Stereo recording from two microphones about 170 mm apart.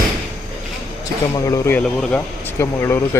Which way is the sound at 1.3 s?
20° left (ahead or behind).